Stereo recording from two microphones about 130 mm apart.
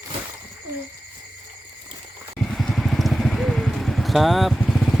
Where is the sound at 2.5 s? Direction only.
Centre (ahead or behind).